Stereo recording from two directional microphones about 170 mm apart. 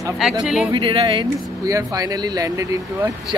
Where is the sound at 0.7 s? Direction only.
30° right (ahead or behind).